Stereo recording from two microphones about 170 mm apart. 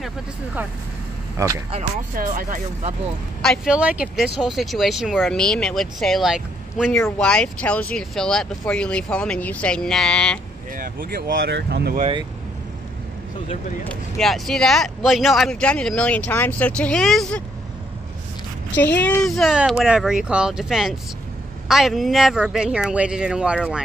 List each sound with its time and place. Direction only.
2.1 s speech: 55° right (ahead or behind)
3.4 s speech: 5° right (ahead or behind)
10.8 s speech: 60° right (ahead or behind); by 11.9 s 80° right
13.8 s speech: centre (ahead or behind)
18.8 s speech: 10° left (ahead or behind); by 23.8 s 5° right (ahead or behind)